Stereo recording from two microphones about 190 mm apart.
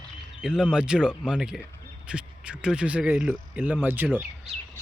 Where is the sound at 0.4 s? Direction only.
5° right (ahead or behind).